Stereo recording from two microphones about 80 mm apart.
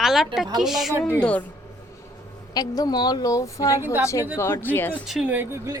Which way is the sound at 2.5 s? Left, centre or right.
Left.